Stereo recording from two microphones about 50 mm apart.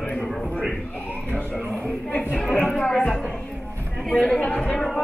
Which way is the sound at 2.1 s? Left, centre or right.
Left.